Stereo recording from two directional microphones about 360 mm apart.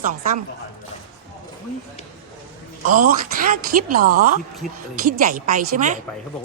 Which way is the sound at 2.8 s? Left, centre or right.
Right.